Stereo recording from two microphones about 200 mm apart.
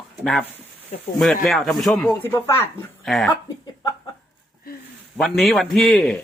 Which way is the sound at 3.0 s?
Centre (ahead or behind).